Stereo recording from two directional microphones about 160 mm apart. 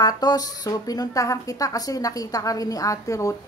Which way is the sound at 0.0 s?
25° left (ahead or behind).